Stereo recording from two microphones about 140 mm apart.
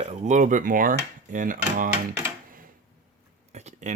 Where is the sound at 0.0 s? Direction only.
55° right (ahead or behind); by 1.9 s 70° right (ahead or behind).